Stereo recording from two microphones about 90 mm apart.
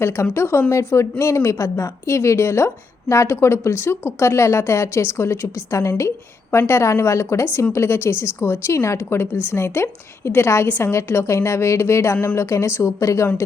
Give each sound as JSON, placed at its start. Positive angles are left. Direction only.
{"t": 0.0, "sound": "a woman's voice", "side_deg": 30}